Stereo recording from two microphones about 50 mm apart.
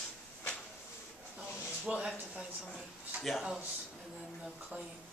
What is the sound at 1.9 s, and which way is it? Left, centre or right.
Speech, right.